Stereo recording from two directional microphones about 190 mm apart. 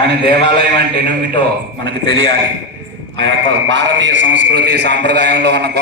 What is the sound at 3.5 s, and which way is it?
A man's voice, 75° right (ahead or behind).